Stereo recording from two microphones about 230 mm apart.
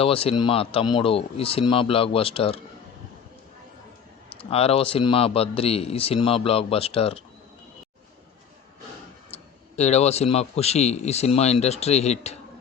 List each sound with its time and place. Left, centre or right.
0.0 s a man's voice: left
4.4 s a man's voice: left
9.3 s a man's voice: left